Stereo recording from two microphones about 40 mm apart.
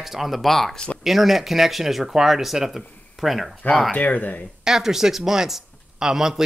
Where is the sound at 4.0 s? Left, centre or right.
Left.